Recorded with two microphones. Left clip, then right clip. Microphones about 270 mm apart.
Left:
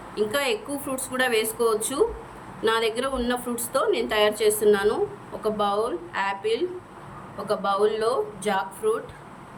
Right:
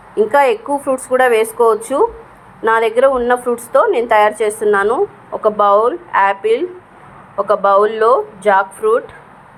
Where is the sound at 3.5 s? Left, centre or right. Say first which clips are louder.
Right 11 dB; centre.